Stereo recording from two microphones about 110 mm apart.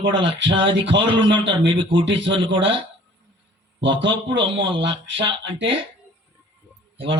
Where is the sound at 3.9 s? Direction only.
50° right (ahead or behind).